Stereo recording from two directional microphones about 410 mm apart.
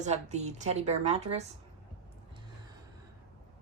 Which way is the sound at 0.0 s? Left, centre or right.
Centre.